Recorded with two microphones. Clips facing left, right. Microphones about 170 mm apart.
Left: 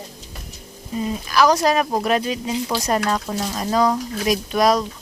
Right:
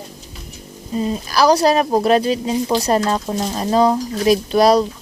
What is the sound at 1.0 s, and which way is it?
Speech, 35° right (ahead or behind).